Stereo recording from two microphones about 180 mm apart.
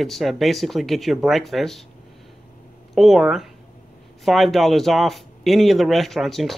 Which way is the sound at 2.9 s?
Centre (ahead or behind).